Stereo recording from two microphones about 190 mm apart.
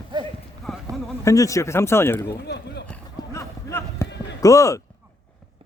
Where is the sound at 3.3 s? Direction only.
15° left (ahead or behind).